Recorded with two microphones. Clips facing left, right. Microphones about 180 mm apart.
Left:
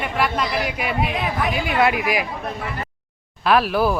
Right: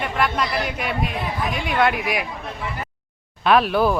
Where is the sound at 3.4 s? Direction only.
Centre (ahead or behind).